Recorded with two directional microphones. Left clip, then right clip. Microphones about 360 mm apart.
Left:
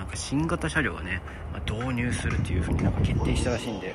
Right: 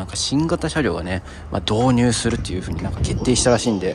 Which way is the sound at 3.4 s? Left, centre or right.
Right.